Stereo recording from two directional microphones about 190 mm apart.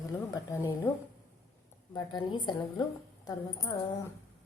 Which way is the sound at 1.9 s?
25° left (ahead or behind).